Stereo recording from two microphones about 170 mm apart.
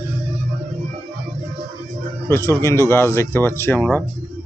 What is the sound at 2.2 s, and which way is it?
A man's voice, 15° left (ahead or behind).